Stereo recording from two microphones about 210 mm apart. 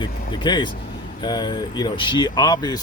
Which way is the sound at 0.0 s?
20° left (ahead or behind).